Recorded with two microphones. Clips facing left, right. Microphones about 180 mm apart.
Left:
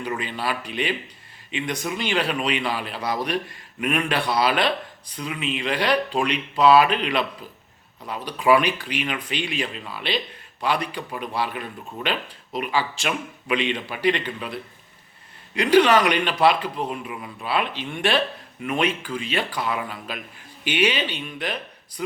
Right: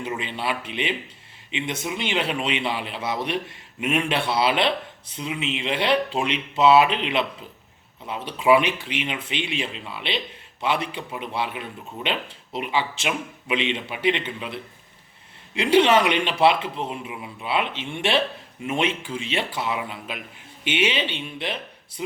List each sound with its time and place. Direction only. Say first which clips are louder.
0.2 s a man's voice: even; 25° right (ahead or behind)